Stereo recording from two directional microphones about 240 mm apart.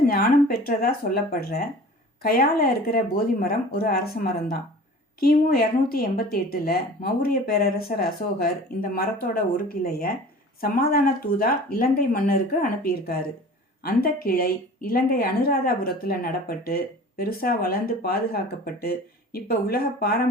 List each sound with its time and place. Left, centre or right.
0.0 s a woman's voice: left